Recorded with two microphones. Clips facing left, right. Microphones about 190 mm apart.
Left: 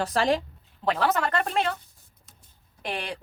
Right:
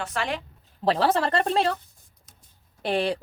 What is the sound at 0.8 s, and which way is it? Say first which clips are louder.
Speech: right 3 dB; 30° right (ahead or behind).